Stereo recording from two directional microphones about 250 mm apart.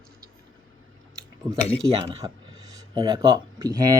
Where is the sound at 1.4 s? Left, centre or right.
Centre.